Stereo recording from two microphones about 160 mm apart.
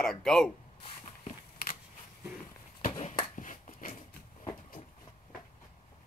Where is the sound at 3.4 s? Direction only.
55° left (ahead or behind).